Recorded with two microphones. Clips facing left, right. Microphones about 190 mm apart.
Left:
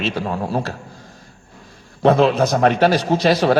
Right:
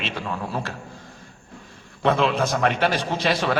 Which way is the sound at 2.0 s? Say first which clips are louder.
Left 6 dB; 40° left (ahead or behind).